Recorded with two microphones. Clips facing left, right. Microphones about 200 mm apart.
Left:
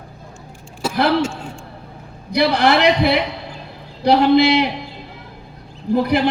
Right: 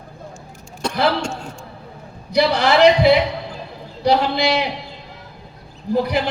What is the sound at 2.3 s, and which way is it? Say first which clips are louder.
Speech: left 1 dB; 60° left (ahead or behind).